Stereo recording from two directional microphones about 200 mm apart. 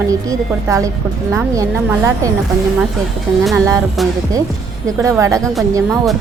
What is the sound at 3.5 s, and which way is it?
Speech, 15° right (ahead or behind).